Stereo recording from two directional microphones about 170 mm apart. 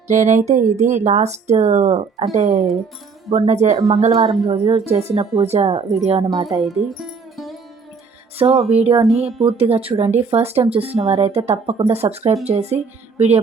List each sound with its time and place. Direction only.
0.1 s speech: 45° right (ahead or behind)
6.2 s speech: 20° right (ahead or behind)
6.6 s music: centre (ahead or behind)
8.4 s speech: 35° right (ahead or behind)